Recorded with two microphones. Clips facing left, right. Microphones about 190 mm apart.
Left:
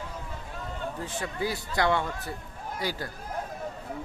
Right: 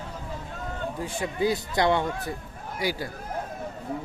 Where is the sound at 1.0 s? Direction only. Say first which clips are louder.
Right 6 dB; 15° right (ahead or behind).